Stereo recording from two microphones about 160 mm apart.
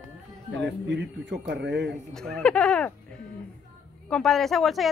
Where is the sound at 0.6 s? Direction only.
90° right.